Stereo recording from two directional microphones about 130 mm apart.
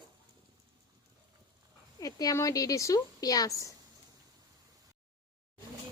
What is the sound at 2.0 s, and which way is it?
A woman's voice, 30° left (ahead or behind).